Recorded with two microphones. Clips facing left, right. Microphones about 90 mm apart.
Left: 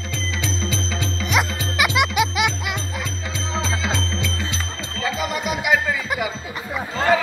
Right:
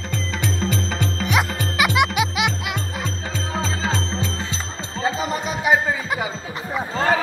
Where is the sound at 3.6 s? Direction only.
40° right (ahead or behind).